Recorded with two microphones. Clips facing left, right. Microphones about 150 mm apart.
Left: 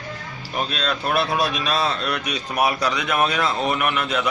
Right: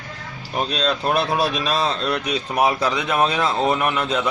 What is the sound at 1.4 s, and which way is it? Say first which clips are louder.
Speech: right 1 dB; 35° right (ahead or behind).